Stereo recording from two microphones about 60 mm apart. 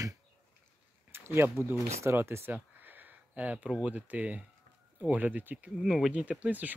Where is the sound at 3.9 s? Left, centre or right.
Right.